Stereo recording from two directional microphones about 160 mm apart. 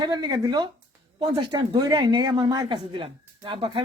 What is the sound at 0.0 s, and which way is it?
Speech, 25° right (ahead or behind).